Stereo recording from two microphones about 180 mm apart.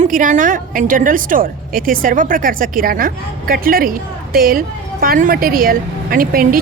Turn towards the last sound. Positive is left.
turn(degrees=-55)  # may be behind; listen again after turning